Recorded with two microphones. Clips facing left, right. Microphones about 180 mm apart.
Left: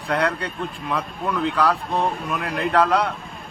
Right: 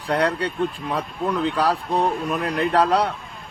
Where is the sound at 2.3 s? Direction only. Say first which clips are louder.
Right 2 dB; 35° right (ahead or behind).